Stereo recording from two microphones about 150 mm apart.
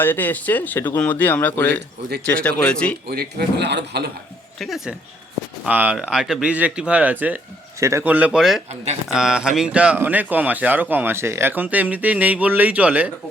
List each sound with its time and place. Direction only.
0.0 s speech: 15° left (ahead or behind)
3.1 s speech: 90° right
4.6 s speech: centre (ahead or behind)